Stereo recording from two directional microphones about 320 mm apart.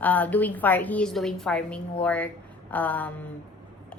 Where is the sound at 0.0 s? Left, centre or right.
Centre.